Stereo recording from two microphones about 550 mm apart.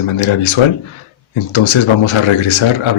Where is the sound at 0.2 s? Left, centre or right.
Left.